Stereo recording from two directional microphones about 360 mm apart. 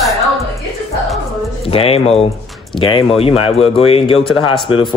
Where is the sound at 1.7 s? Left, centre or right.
Centre.